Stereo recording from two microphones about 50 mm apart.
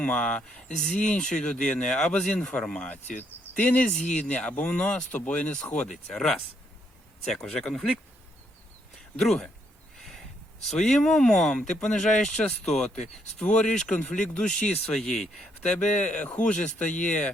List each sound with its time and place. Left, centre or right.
0.0 s speech: left
3.2 s speech: left
3.8 s speech: left
5.7 s speech: centre
7.3 s speech: centre
9.1 s speech: centre
10.7 s speech: centre
13.4 s speech: left